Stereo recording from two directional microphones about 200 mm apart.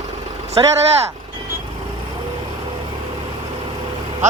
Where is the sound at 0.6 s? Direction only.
25° right (ahead or behind).